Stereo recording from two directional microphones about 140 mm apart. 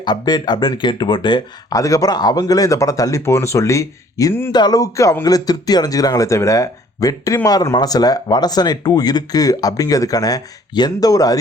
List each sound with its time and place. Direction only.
0.0 s speech: 30° left (ahead or behind)